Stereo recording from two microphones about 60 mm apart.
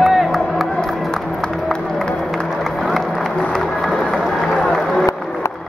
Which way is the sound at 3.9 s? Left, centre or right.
Centre.